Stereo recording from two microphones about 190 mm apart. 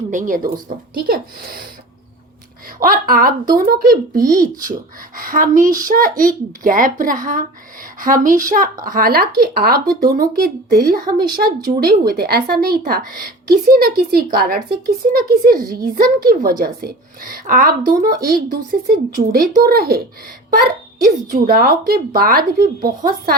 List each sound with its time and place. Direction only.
0.1 s a woman's voice: 45° right (ahead or behind)
2.7 s a woman's voice: 45° right (ahead or behind)
21.3 s a woman's voice: 50° right (ahead or behind)